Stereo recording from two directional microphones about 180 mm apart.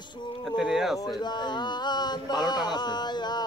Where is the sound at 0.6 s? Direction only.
Centre (ahead or behind).